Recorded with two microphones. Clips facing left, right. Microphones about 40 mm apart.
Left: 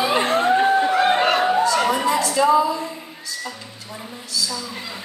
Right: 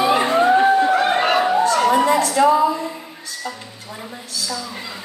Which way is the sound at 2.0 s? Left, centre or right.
Right.